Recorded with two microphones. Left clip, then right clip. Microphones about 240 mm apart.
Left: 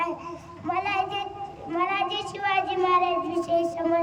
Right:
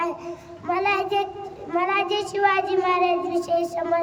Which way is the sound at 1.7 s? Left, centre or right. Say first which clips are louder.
Right 4 dB; centre.